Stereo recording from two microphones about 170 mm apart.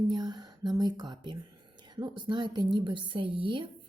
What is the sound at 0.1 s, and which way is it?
Speech, 25° right (ahead or behind).